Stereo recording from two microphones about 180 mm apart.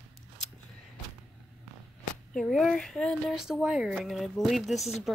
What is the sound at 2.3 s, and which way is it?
Speech, centre (ahead or behind).